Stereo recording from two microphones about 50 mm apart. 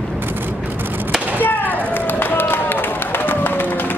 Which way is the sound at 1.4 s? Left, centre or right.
Left.